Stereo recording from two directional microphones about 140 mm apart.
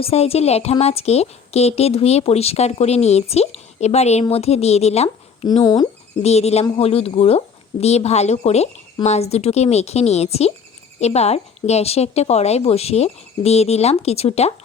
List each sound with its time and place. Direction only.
0.0 s a woman's voice: 45° left (ahead or behind)
5.0 s a sound: 35° left (ahead or behind)
5.6 s speech: 30° left (ahead or behind)
6.2 s a woman's voice: 50° left (ahead or behind)